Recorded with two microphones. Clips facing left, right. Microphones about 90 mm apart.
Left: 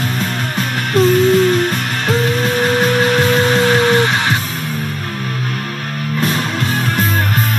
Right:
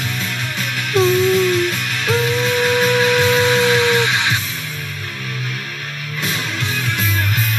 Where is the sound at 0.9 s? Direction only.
45° left (ahead or behind).